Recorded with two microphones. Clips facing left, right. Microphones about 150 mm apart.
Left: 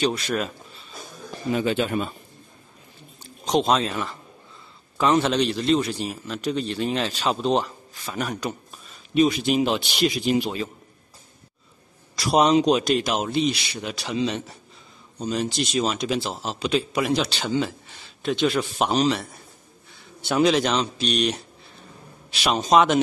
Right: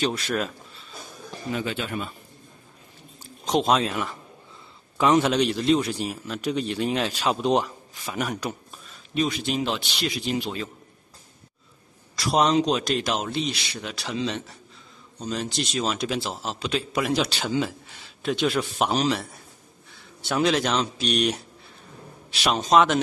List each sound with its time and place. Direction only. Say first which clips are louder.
1.5 s speech: left 6 dB; 20° left (ahead or behind)
3.4 s a man's voice: left 1 dB; 5° right (ahead or behind)
9.1 s speech: left 6 dB; 10° left (ahead or behind)
12.3 s a man's voice: left 3 dB; 5° left (ahead or behind)
20.2 s a man's voice: left 3 dB; centre (ahead or behind)